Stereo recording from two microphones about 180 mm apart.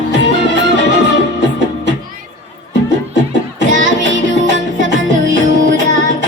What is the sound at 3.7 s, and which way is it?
Music, 90° right.